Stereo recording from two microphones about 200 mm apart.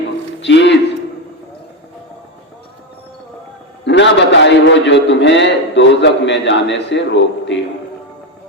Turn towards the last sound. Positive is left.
turn(degrees=65)  # may be behind; listen again after turning